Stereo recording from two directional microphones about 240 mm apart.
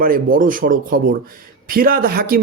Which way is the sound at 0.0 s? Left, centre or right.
Right.